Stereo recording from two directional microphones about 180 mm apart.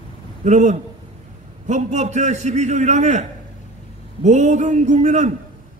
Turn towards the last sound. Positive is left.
turn(degrees=-40)  # may be behind; listen again after turning